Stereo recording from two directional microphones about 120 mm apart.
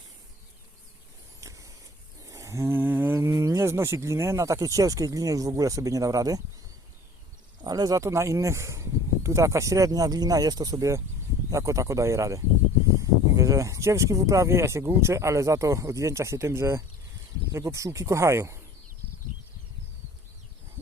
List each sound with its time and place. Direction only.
1.4 s vehicle: 25° right (ahead or behind)
2.2 s speech: 25° right (ahead or behind)
7.6 s speech: 30° right (ahead or behind)